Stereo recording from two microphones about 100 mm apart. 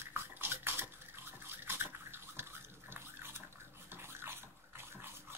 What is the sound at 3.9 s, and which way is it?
Toothbrush, 25° right (ahead or behind).